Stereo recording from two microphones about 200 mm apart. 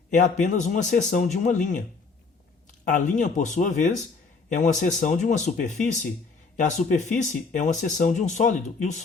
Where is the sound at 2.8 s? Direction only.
40° left (ahead or behind).